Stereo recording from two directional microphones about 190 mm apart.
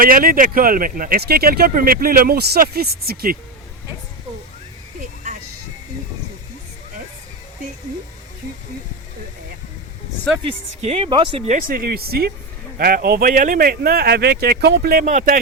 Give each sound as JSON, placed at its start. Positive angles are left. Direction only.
{"t": 0.0, "sound": "speech", "side_deg": -50}
{"t": 4.9, "sound": "a sound", "side_deg": -45}
{"t": 10.8, "sound": "speech", "side_deg": -30}
{"t": 11.5, "sound": "speech", "side_deg": -50}
{"t": 15.0, "sound": "speech", "side_deg": -40}